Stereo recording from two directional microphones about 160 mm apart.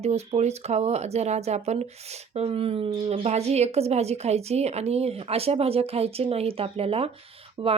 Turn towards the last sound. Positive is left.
turn(degrees=-30)  # may be behind; listen again after turning